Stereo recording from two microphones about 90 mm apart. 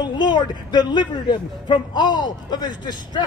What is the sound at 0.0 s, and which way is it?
A man's voice, 55° left (ahead or behind).